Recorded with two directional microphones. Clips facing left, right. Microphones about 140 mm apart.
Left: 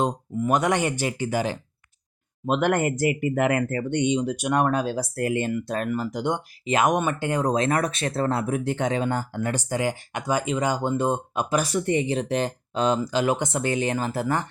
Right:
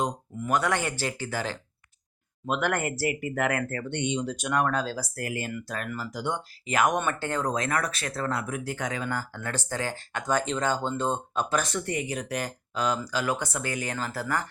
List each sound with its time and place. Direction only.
0.0 s speech: 20° left (ahead or behind)
11.9 s speech: 25° left (ahead or behind)